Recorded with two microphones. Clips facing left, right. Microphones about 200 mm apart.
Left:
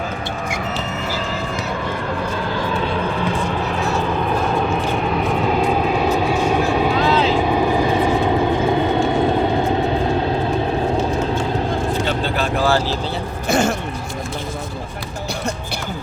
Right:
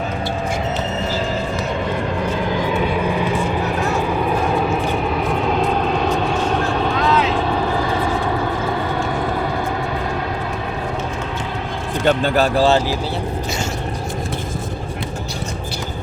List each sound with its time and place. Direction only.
2.5 s vehicle: 20° right (ahead or behind)
5.1 s vehicle: centre (ahead or behind)
7.0 s vehicle: 30° left (ahead or behind)
7.3 s vehicle: 15° left (ahead or behind)
12.0 s vehicle: 50° right (ahead or behind)
12.5 s speech: 25° right (ahead or behind)
13.5 s a sound: 55° left (ahead or behind)